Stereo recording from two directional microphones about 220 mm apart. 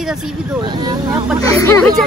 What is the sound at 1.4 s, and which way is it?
Speech, 15° left (ahead or behind).